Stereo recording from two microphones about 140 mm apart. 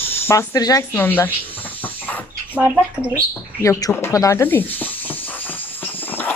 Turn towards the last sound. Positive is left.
turn(degrees=15)  # may be behind; listen again after turning